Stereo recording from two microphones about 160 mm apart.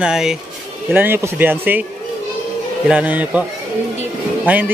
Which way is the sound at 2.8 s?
10° right (ahead or behind).